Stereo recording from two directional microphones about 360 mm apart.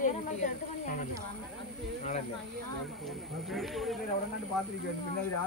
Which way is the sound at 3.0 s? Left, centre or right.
Centre.